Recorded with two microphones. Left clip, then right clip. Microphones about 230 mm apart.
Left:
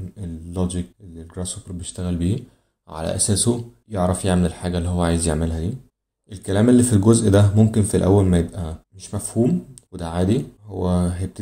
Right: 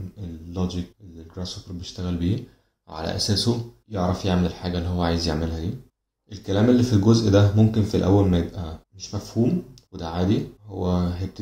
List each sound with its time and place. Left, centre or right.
0.2 s speech: left